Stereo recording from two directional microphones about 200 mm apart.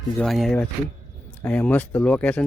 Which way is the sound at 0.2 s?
Centre (ahead or behind).